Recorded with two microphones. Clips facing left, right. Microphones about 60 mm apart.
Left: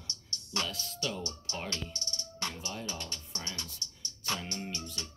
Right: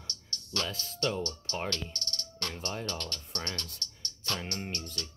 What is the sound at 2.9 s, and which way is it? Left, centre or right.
Speech, centre.